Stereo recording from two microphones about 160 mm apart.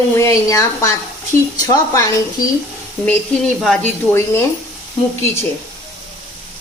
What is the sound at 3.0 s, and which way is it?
Speech, 5° left (ahead or behind).